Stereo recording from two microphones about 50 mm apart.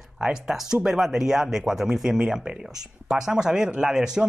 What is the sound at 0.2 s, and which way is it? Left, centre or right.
Speech, centre.